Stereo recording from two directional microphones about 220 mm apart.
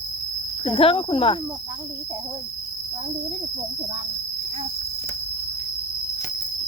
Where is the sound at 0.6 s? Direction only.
25° left (ahead or behind).